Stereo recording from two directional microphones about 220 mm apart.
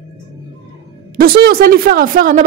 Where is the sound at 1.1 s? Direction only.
40° right (ahead or behind).